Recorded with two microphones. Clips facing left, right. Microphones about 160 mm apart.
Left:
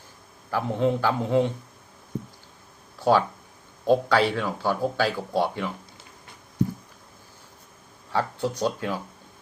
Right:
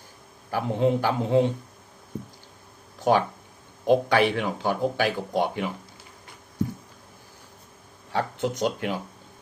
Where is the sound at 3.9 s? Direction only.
20° right (ahead or behind).